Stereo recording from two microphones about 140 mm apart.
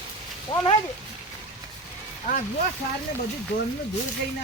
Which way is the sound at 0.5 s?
35° left (ahead or behind).